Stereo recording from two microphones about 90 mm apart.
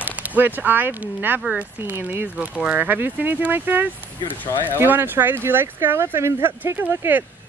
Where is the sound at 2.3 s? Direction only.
10° right (ahead or behind).